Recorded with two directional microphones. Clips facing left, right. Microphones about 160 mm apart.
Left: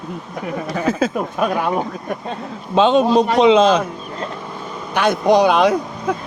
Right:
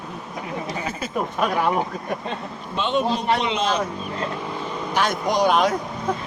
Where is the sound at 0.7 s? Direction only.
90° left.